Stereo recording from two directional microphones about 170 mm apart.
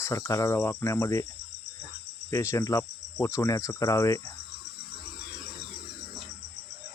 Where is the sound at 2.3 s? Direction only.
15° left (ahead or behind).